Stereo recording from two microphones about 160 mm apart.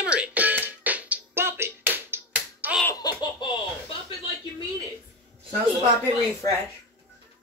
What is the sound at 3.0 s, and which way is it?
Laughter, 25° left (ahead or behind).